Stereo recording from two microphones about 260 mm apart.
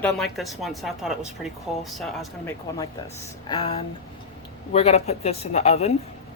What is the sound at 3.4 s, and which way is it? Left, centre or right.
Speech, left.